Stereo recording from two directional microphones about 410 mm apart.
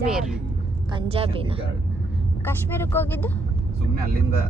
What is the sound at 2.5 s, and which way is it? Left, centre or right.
Speech, centre.